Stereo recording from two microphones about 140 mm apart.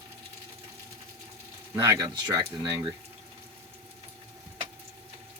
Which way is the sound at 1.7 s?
25° right (ahead or behind).